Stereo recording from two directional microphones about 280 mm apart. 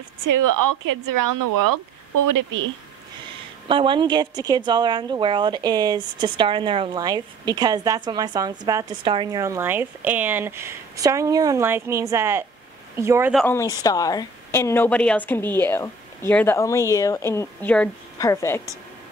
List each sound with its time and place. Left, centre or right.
0.2 s a woman's voice: right
3.6 s a woman's voice: centre